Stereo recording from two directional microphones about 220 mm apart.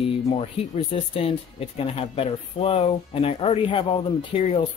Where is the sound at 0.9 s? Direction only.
25° left (ahead or behind).